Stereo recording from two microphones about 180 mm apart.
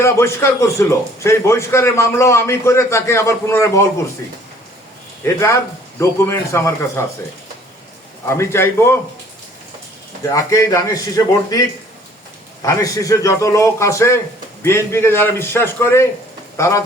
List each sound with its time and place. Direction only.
0.0 s a man's voice: 15° left (ahead or behind)
5.2 s a man's voice: 15° left (ahead or behind)
8.3 s a man's voice: 15° left (ahead or behind)
10.2 s a man's voice: 20° left (ahead or behind)
12.6 s a man's voice: 20° left (ahead or behind)